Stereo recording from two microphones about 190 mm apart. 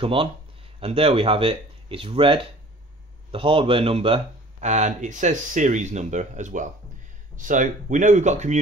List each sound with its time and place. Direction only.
0.0 s speech: 30° right (ahead or behind)